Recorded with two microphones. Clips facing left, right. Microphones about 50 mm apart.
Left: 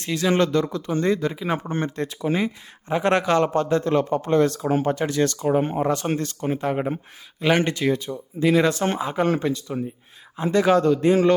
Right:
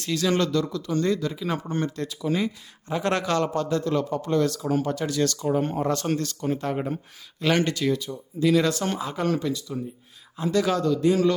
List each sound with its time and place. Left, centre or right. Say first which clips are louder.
0.0 s a man's voice: left 3 dB; left